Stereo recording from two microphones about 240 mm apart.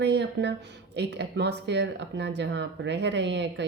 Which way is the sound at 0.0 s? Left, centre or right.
Right.